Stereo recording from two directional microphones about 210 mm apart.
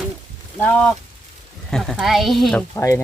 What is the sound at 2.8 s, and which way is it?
Speech, 15° left (ahead or behind).